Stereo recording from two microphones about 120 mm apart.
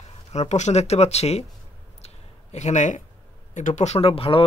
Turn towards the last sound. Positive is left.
turn(degrees=50)  # may be behind; listen again after turning